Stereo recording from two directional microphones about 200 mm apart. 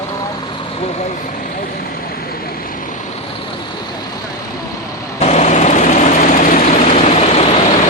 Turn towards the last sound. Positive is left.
turn(degrees=35)  # may be behind; listen again after turning